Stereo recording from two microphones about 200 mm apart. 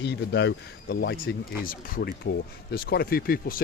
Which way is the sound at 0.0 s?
60° left (ahead or behind).